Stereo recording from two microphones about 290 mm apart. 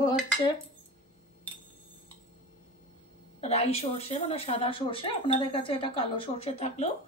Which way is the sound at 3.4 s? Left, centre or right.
Left.